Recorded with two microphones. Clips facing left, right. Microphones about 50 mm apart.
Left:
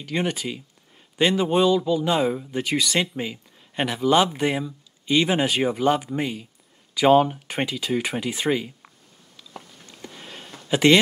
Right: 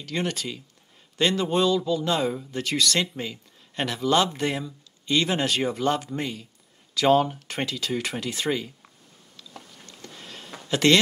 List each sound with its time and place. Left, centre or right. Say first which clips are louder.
0.0 s speech: left 3 dB; centre
9.4 s a sound: left 3 dB; centre
10.7 s speech: left 3 dB; centre